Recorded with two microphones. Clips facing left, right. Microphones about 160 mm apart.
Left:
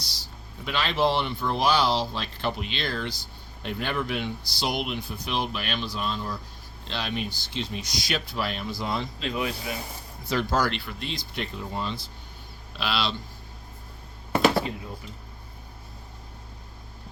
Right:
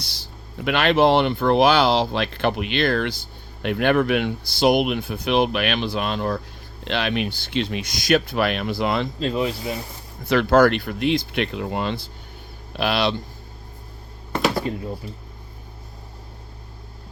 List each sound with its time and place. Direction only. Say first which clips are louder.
0.6 s speech: right 8 dB; 65° right (ahead or behind)
9.2 s speech: right 6 dB; 30° right (ahead or behind)
10.2 s speech: right 10 dB; 65° right (ahead or behind)
11.3 s speech: right 8 dB; 75° right (ahead or behind)
12.7 s speech: right 7 dB; 55° right (ahead or behind)